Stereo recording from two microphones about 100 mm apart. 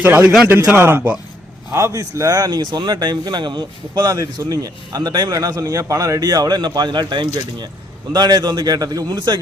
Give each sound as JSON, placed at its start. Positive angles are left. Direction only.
{"t": 0.0, "sound": "speech", "side_deg": -20}